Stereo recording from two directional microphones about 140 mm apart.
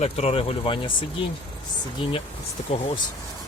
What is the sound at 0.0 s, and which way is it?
Speech, 45° left (ahead or behind).